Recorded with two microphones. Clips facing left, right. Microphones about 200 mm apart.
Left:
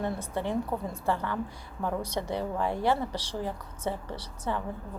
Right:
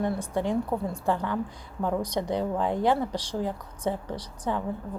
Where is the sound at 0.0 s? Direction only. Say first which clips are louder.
Right 4 dB; 15° right (ahead or behind).